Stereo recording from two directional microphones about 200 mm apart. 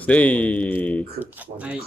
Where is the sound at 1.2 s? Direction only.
5° right (ahead or behind).